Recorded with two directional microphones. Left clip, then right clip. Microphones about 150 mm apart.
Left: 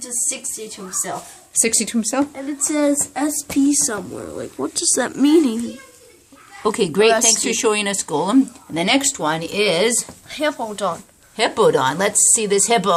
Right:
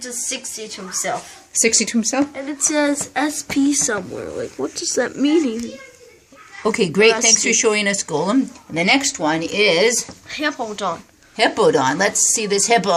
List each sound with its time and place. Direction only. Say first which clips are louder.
1.5 s a woman's voice: right 3 dB; centre (ahead or behind)
4.5 s speech: left 1 dB; 25° left (ahead or behind)
6.6 s speech: right 1 dB; centre (ahead or behind)
10.8 s a woman's voice: left 1 dB; 20° left (ahead or behind)
11.3 s speech: right 1 dB; 5° right (ahead or behind)